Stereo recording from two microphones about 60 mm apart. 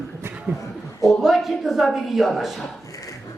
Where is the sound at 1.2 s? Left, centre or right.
Centre.